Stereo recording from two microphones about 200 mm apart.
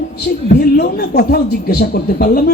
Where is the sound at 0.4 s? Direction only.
55° left (ahead or behind).